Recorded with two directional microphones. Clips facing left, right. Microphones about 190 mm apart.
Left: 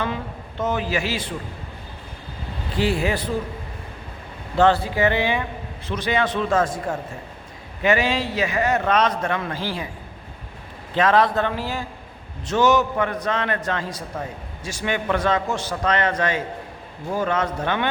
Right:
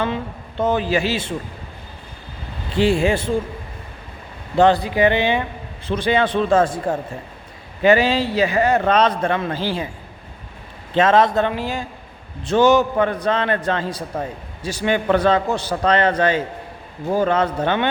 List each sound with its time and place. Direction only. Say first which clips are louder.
0.6 s a man's voice: right 5 dB; 30° right (ahead or behind)
2.7 s a man's voice: right 5 dB; 25° right (ahead or behind)
4.5 s a man's voice: right 3 dB; 15° right (ahead or behind)
10.9 s a man's voice: right 3 dB; 25° right (ahead or behind)
12.5 s a man's voice: right 4 dB; 30° right (ahead or behind)